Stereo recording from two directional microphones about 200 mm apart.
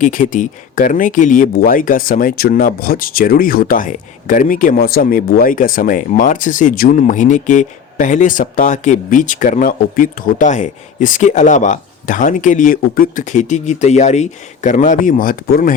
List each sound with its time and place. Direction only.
0.0 s speech: 40° left (ahead or behind)